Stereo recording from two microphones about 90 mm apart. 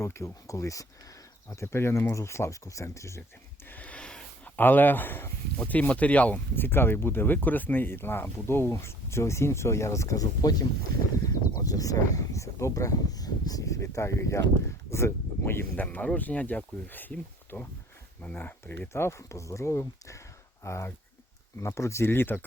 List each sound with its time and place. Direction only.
0.0 s speech: 30° left (ahead or behind)
3.7 s a sound: 15° left (ahead or behind)
5.5 s speech: 15° left (ahead or behind)
15.7 s speech: 20° left (ahead or behind)